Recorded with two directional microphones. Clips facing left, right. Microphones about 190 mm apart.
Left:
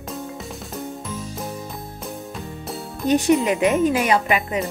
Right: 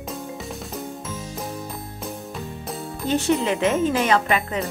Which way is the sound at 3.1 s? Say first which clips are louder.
Left 4 dB; 15° left (ahead or behind).